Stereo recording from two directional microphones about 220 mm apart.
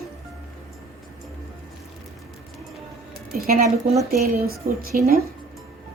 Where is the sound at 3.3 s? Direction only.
40° right (ahead or behind).